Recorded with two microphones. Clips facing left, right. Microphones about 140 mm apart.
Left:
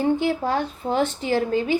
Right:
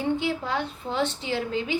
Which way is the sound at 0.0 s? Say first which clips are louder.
Left 5 dB; 45° left (ahead or behind).